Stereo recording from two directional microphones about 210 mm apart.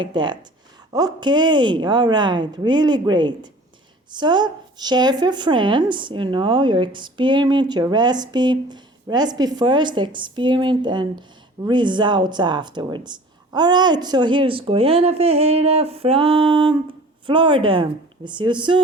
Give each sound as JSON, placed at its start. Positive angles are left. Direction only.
{"t": 0.0, "sound": "a woman's voice", "side_deg": -20}